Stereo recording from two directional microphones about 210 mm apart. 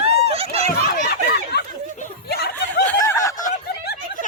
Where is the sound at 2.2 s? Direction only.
50° left (ahead or behind).